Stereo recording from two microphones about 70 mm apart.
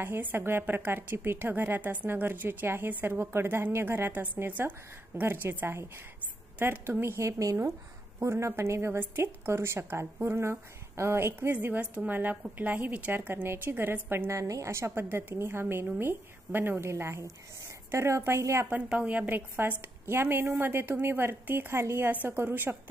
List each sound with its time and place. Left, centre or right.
0.0 s a woman's voice: right
14.3 s a woman's voice: right
18.7 s a woman's voice: right
22.1 s a woman's voice: right